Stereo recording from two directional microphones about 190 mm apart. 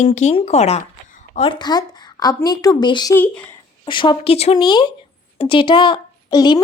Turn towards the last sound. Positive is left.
turn(degrees=20)  # may be behind; listen again after turning